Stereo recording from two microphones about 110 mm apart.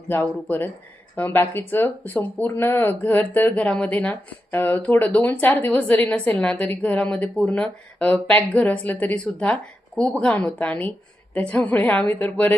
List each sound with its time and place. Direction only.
0.1 s speech: 20° left (ahead or behind)